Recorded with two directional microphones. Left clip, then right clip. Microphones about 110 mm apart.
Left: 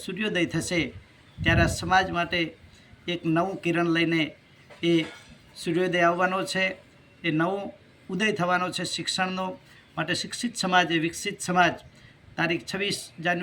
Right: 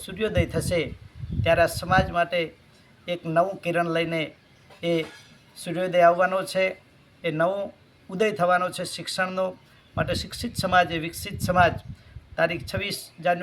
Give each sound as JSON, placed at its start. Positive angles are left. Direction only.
{"t": 0.0, "sound": "speech", "side_deg": -35}